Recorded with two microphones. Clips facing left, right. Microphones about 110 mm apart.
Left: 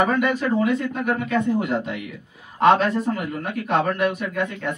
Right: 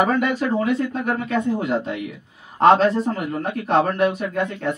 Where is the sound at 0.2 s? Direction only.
30° right (ahead or behind).